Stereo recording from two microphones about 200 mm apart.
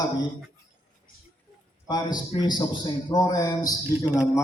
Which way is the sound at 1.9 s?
20° left (ahead or behind).